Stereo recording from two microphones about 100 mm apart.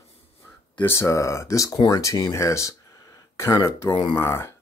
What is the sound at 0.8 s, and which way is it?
Speech, 25° left (ahead or behind).